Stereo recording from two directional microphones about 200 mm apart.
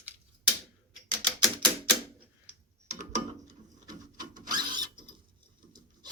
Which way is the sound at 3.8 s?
20° right (ahead or behind).